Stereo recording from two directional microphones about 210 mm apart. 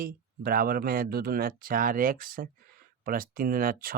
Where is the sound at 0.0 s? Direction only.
45° right (ahead or behind).